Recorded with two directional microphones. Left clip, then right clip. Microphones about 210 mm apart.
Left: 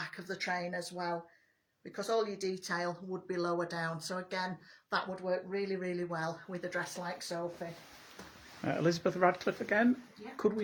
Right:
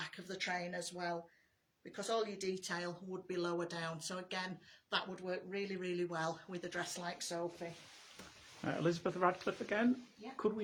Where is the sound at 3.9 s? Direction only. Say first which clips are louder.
Left 5 dB; 30° right (ahead or behind).